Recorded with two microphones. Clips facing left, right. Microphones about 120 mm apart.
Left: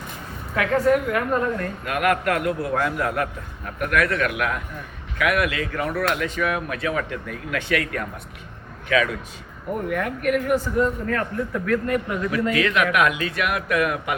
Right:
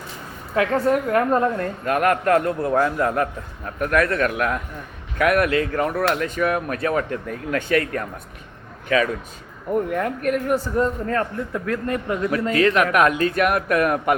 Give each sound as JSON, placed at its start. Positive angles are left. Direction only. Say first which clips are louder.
{"t": 0.5, "sound": "a man's voice", "louder": "even", "side_deg": -30}
{"t": 9.9, "sound": "a man's voice", "louder": "right 1 dB", "side_deg": -30}